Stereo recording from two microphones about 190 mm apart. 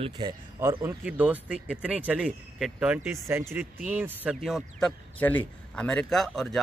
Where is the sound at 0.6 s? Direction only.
15° right (ahead or behind).